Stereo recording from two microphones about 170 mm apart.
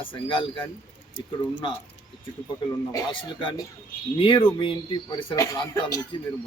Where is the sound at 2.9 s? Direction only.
30° left (ahead or behind).